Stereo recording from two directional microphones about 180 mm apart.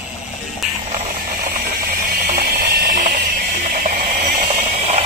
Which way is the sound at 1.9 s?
55° right (ahead or behind).